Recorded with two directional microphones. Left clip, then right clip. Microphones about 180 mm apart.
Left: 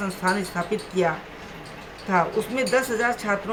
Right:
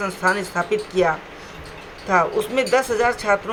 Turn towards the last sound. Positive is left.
turn(degrees=-25)  # may be behind; listen again after turning